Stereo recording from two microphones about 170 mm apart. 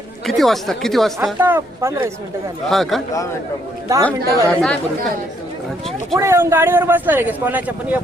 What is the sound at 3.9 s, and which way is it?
Speech, 20° right (ahead or behind).